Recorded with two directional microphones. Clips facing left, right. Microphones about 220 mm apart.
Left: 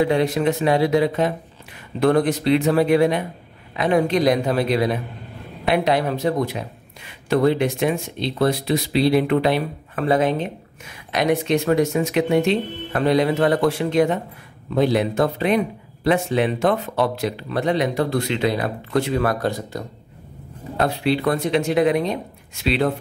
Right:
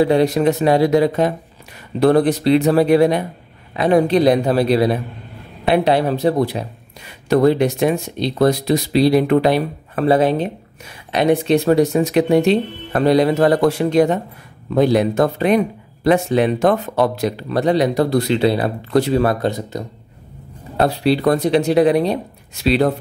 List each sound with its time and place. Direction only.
0.0 s speech: 35° right (ahead or behind); by 19.8 s 20° right (ahead or behind)
20.7 s speech: 35° right (ahead or behind)